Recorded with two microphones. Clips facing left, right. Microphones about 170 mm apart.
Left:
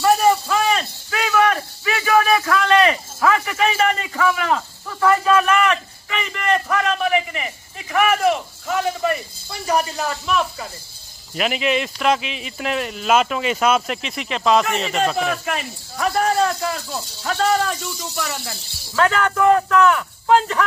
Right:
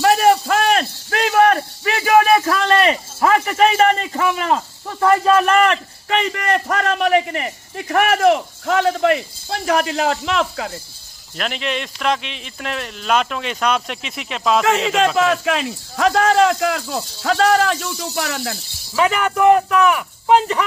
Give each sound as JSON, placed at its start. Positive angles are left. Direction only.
{"t": 0.0, "sound": "a sound", "side_deg": -75}
{"t": 2.0, "sound": "a sound", "side_deg": -30}
{"t": 6.2, "sound": "a man's voice", "side_deg": -55}
{"t": 11.3, "sound": "speech", "side_deg": 5}
{"t": 14.6, "sound": "speech", "side_deg": -90}
{"t": 18.9, "sound": "speech", "side_deg": -15}